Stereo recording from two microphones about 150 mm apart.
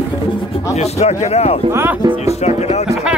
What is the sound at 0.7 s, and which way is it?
Speech, 45° left (ahead or behind).